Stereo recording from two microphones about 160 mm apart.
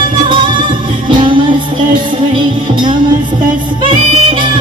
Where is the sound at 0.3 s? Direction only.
30° right (ahead or behind).